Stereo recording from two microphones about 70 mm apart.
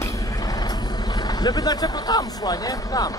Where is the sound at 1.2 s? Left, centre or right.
Left.